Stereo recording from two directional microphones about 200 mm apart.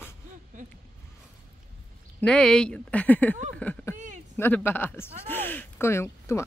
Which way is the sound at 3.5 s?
10° left (ahead or behind).